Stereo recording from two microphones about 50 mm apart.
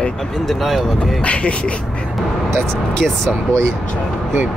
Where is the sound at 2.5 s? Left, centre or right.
Centre.